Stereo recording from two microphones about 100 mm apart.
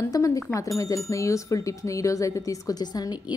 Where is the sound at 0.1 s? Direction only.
35° left (ahead or behind).